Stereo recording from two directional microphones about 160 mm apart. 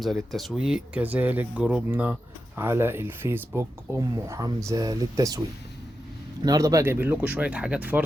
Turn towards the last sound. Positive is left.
turn(degrees=-10)  # may be behind; listen again after turning